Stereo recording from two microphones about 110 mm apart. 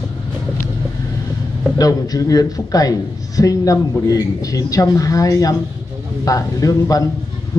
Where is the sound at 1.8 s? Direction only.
35° left (ahead or behind).